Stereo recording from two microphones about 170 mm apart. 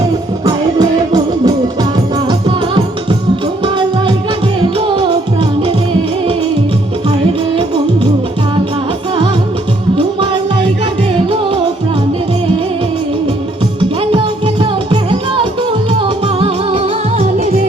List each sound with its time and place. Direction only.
0.4 s music: 25° right (ahead or behind)
4.8 s music: 30° right (ahead or behind)
14.1 s music: 30° right (ahead or behind)